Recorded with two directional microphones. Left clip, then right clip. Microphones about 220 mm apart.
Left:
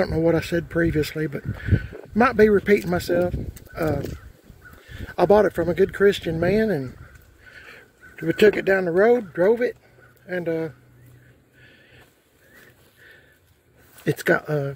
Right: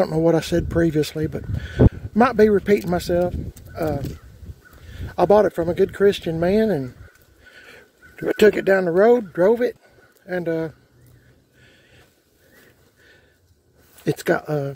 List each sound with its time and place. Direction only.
0.0 s speech: 20° right (ahead or behind)
3.8 s speech: centre (ahead or behind)
4.8 s a sound: 10° right (ahead or behind)
5.6 s speech: 10° right (ahead or behind)
7.5 s a sound: 25° right (ahead or behind)
8.9 s speech: 20° right (ahead or behind)
14.0 s speech: 10° right (ahead or behind)